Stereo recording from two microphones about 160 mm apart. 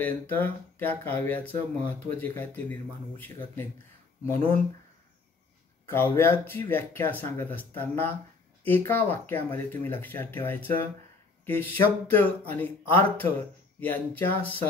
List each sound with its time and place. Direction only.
0.0 s speech: 10° left (ahead or behind)
5.9 s speech: 15° left (ahead or behind)